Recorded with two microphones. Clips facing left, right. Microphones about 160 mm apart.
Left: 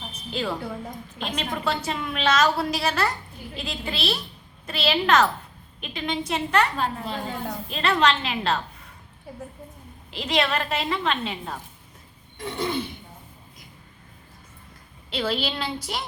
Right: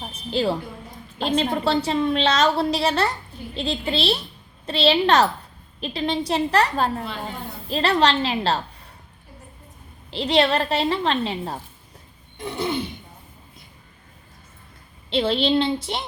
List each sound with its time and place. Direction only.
0.1 s a sound: 30° right (ahead or behind)
1.2 s a woman's voice: 30° right (ahead or behind)
10.1 s a woman's voice: 30° right (ahead or behind)
12.4 s throat clearing: 20° right (ahead or behind)
15.1 s a woman's voice: 25° right (ahead or behind)